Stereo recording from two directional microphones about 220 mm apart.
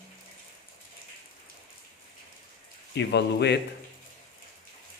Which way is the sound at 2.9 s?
50° left (ahead or behind).